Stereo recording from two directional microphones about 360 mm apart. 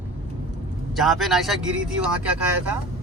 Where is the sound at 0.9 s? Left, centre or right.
Centre.